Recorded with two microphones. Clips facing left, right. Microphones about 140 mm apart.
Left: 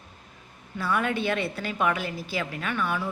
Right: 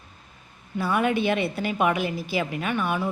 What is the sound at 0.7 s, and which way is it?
A woman's voice, 15° right (ahead or behind).